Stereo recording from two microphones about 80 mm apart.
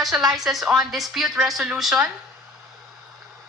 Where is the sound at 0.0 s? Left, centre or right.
Centre.